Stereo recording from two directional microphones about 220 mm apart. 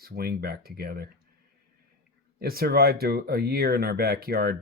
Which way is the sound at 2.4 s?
45° right (ahead or behind).